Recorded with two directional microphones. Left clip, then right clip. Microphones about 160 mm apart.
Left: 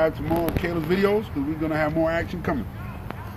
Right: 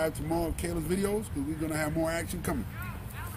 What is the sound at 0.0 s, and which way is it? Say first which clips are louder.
Speech: left 8 dB; 10° right (ahead or behind).